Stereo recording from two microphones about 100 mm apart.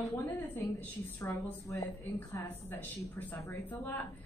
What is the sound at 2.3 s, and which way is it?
Speech, 20° left (ahead or behind).